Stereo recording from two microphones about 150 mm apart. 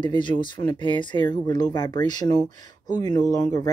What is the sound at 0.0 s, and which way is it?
Speech, 35° left (ahead or behind).